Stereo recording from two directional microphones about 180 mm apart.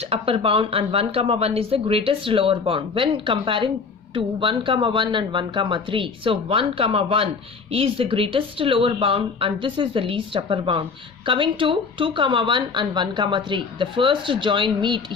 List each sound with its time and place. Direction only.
0.0 s speech: 30° right (ahead or behind)